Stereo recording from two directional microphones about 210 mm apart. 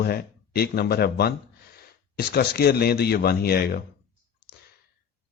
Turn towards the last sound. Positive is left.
turn(degrees=50)  # may be behind; listen again after turning